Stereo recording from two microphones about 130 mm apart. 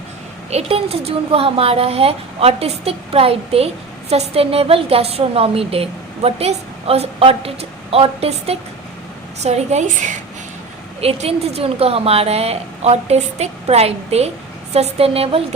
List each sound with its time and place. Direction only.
0.5 s a woman's voice: 50° right (ahead or behind)
11.0 s a woman's voice: 50° right (ahead or behind)